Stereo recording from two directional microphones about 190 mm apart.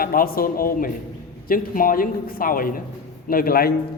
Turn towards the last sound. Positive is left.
turn(degrees=50)  # may be behind; listen again after turning